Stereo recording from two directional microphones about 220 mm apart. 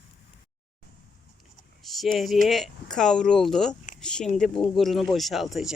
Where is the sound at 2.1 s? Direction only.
Centre (ahead or behind).